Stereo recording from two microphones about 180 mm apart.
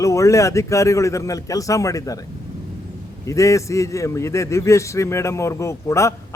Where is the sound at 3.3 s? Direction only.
15° left (ahead or behind).